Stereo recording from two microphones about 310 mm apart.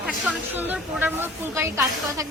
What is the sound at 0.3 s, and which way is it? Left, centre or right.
Speech, centre.